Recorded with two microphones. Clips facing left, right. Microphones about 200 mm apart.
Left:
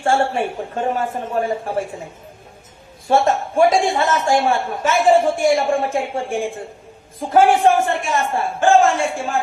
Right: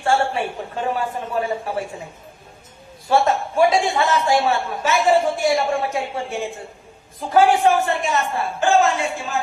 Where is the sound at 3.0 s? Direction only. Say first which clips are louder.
Left 2 dB; 45° left (ahead or behind).